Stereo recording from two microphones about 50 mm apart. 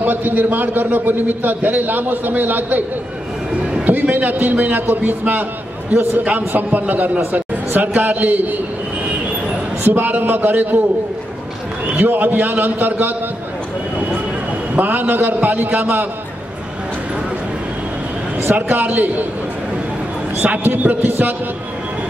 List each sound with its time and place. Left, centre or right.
0.0 s a man's voice: right
3.8 s a man's voice: right
9.8 s a man's voice: right
12.0 s a man's voice: right
14.8 s a man's voice: right
18.4 s a man's voice: right
20.4 s a man's voice: right